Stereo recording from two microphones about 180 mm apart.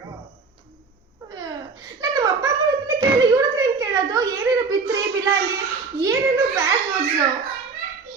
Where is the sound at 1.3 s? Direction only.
20° right (ahead or behind).